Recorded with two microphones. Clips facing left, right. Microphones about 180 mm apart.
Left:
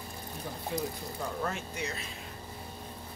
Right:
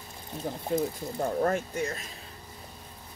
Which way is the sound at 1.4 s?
50° right (ahead or behind).